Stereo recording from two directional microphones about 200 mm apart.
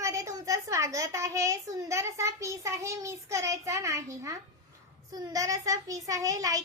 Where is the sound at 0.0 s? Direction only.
15° right (ahead or behind).